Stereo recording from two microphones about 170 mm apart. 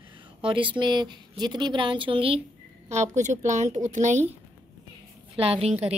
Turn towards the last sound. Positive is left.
turn(degrees=-40)  # may be behind; listen again after turning